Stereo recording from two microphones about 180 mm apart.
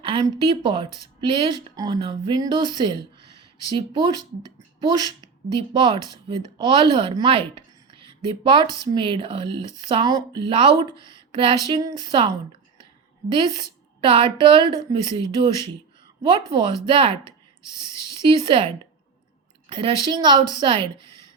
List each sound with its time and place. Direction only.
0.0 s speech: 30° right (ahead or behind)
5.2 s speech: 25° right (ahead or behind)
19.7 s speech: 25° right (ahead or behind)